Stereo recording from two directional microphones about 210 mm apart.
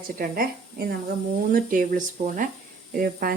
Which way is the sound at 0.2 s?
45° right (ahead or behind).